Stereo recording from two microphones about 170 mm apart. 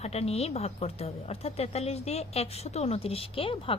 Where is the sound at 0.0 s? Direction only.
40° left (ahead or behind).